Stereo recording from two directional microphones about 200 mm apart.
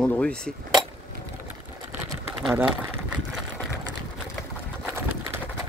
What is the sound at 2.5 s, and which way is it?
Speech, 10° right (ahead or behind).